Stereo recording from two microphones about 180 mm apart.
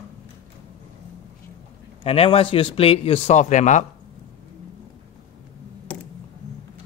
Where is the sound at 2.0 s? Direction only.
35° left (ahead or behind).